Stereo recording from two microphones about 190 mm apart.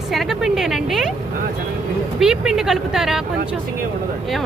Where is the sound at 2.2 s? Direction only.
5° right (ahead or behind).